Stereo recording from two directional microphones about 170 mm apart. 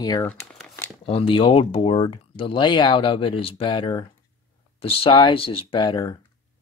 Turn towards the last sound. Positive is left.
turn(degrees=25)  # may be behind; listen again after turning